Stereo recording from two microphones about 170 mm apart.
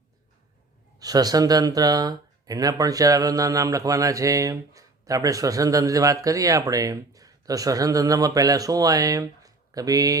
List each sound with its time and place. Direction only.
0.9 s speech: 20° right (ahead or behind)